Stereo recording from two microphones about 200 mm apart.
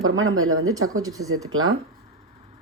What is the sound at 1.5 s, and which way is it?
Speech, 90° right.